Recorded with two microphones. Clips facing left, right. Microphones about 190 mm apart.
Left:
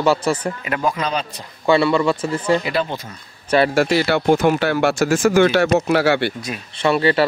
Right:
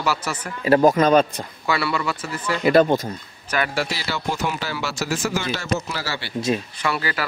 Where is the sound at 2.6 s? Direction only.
45° right (ahead or behind).